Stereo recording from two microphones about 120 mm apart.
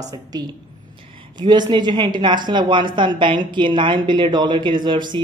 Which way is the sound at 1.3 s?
35° right (ahead or behind).